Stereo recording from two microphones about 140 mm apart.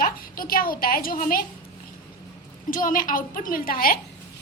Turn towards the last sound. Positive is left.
turn(degrees=90)